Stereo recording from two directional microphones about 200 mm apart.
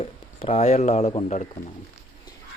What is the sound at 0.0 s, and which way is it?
Speech, 30° left (ahead or behind).